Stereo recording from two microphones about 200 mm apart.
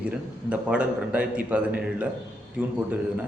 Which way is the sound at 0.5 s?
5° right (ahead or behind).